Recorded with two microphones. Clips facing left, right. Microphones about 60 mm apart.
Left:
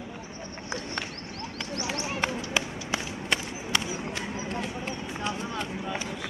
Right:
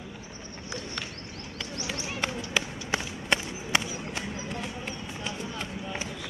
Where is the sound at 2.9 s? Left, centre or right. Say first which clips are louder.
Right 2 dB; right.